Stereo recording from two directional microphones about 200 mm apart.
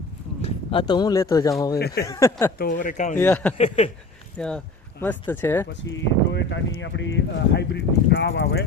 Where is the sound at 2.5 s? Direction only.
45° left (ahead or behind).